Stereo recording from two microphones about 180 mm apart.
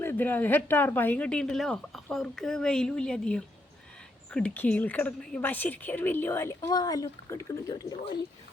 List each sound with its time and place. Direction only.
0.0 s a woman's voice: 10° left (ahead or behind)